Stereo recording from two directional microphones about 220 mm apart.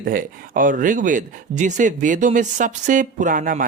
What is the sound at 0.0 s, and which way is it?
A man's voice, 40° right (ahead or behind).